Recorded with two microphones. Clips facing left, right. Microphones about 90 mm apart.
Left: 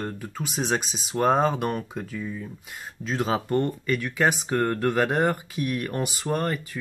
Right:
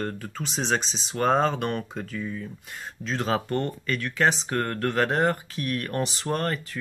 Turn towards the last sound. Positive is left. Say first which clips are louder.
# left 1 dB
turn(degrees=10)  # may be behind; listen again after turning